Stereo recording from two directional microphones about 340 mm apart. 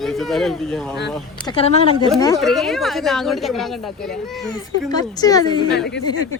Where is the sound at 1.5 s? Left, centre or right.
Centre.